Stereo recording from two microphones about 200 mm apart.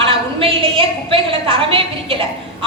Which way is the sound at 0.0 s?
25° right (ahead or behind).